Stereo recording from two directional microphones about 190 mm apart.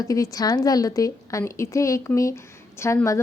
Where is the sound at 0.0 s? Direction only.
20° left (ahead or behind).